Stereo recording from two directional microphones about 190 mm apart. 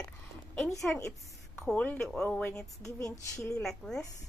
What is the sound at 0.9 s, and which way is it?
A woman's voice, 10° left (ahead or behind).